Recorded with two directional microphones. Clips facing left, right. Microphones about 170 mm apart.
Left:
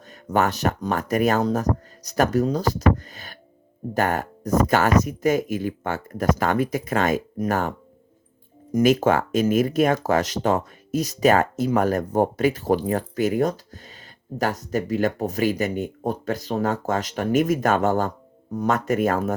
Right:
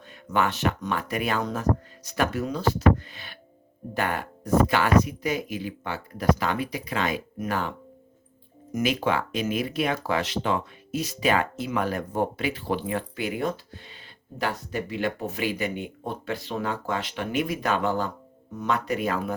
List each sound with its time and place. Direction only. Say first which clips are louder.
0.3 s speech: left 3 dB; 40° left (ahead or behind)
8.8 s speech: left 7 dB; 45° left (ahead or behind)